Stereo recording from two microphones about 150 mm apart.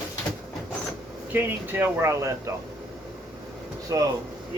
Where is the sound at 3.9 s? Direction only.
20° right (ahead or behind).